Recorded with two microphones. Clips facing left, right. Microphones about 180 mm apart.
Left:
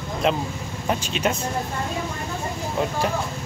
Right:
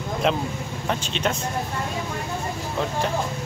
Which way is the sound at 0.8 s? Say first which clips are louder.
Left 2 dB; 10° left (ahead or behind).